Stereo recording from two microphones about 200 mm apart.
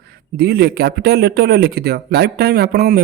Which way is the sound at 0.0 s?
50° right (ahead or behind).